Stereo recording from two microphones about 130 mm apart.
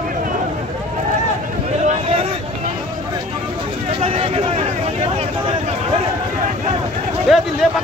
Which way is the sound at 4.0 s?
50° right (ahead or behind).